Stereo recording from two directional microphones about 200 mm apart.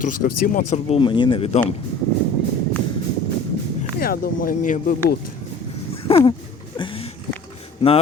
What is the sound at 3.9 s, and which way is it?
Speech, 50° left (ahead or behind).